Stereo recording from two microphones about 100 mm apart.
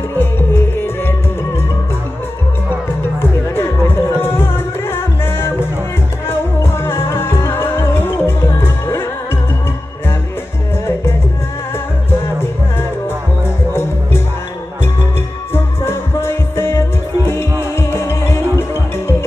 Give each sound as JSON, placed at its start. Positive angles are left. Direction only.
{"t": 0.2, "sound": "music", "side_deg": 25}
{"t": 3.2, "sound": "music", "side_deg": 25}
{"t": 15.5, "sound": "music", "side_deg": 25}